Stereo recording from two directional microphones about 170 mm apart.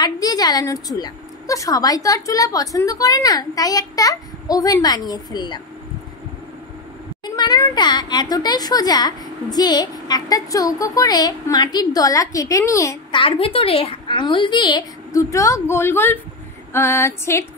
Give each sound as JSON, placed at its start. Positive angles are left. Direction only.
{"t": 0.0, "sound": "a child's voice", "side_deg": 25}
{"t": 7.2, "sound": "a child's voice", "side_deg": 25}
{"t": 13.2, "sound": "a child's voice", "side_deg": 30}
{"t": 16.7, "sound": "music", "side_deg": 15}